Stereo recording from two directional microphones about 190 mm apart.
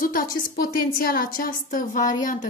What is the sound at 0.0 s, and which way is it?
A woman's voice, 45° left (ahead or behind).